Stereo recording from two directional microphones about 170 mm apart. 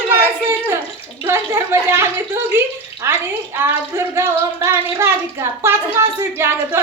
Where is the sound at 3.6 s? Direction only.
15° right (ahead or behind).